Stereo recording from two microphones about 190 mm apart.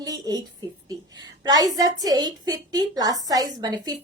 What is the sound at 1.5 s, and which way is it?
A woman's voice, 20° right (ahead or behind).